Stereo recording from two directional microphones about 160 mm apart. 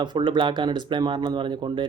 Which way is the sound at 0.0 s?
30° right (ahead or behind).